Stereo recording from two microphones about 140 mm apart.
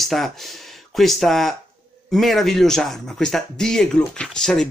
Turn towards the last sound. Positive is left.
turn(degrees=5)  # may be behind; listen again after turning